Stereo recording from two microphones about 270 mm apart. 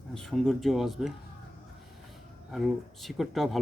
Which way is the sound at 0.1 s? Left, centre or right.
Centre.